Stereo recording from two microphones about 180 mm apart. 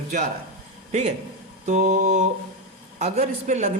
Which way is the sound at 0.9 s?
40° right (ahead or behind).